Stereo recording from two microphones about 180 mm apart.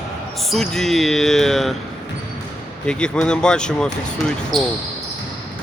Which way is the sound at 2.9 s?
5° left (ahead or behind).